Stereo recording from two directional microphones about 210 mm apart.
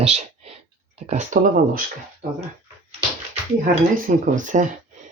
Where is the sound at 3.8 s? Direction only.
40° right (ahead or behind).